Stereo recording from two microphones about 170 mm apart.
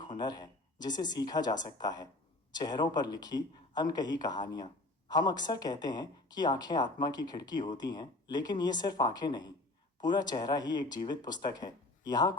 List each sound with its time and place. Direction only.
0.2 s speech: 25° left (ahead or behind)